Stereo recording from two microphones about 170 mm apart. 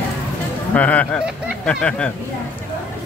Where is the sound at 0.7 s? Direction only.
10° left (ahead or behind).